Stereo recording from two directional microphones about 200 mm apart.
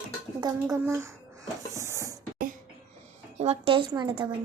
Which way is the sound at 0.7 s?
15° right (ahead or behind).